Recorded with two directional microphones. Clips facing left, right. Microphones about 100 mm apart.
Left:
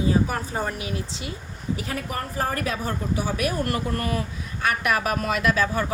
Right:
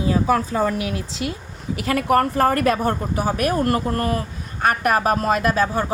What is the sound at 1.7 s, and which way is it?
Speech, 80° right.